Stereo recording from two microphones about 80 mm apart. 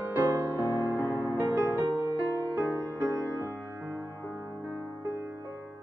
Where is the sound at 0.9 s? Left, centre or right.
Left.